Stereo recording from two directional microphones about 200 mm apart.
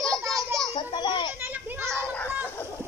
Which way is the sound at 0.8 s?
20° left (ahead or behind).